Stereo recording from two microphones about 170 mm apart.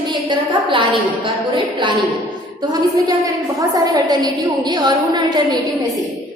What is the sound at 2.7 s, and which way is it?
A woman's voice, 20° right (ahead or behind).